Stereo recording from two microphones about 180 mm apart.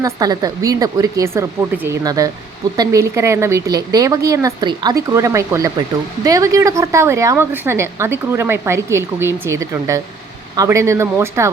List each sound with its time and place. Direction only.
0.0 s a woman's voice: 20° right (ahead or behind)